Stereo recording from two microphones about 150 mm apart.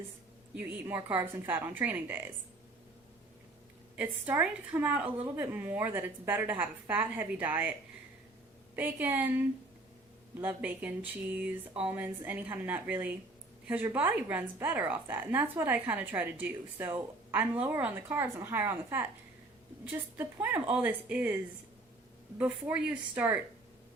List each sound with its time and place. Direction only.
0.5 s a woman's voice: 10° right (ahead or behind)
3.9 s a woman's voice: 10° right (ahead or behind)
8.7 s a woman's voice: 15° right (ahead or behind)
10.4 s a woman's voice: 10° right (ahead or behind)